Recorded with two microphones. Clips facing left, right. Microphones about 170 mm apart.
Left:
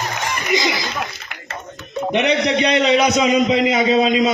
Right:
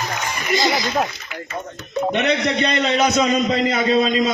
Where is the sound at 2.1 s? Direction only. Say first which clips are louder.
Left 4 dB; 10° left (ahead or behind).